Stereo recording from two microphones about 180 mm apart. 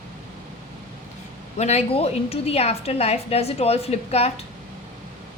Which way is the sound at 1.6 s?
35° left (ahead or behind).